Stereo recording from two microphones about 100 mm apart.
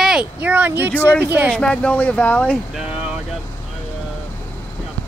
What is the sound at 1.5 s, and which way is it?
Speech, 10° left (ahead or behind).